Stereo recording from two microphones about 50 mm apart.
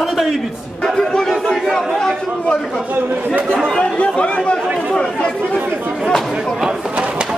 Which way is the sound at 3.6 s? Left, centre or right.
Centre.